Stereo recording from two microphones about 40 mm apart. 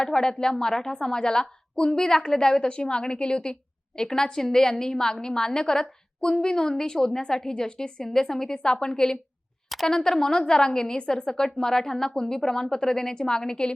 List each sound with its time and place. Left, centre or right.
0.0 s a woman's voice: centre